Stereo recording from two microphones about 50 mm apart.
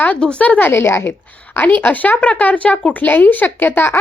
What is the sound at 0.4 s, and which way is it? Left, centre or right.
Speech, left.